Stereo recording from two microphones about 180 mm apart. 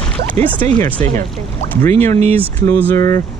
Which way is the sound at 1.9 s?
15° left (ahead or behind).